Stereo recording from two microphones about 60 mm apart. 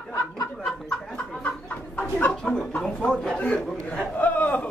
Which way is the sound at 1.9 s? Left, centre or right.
Left.